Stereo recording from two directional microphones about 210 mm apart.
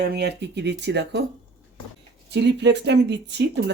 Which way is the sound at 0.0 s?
50° right (ahead or behind).